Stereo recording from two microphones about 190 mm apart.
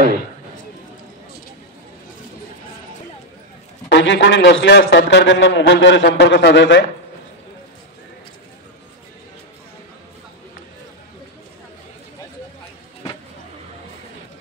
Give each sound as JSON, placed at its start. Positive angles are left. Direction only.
{"t": 3.9, "sound": "a man's voice", "side_deg": 75}